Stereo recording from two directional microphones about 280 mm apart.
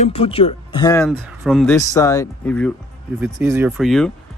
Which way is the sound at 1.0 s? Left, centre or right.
Centre.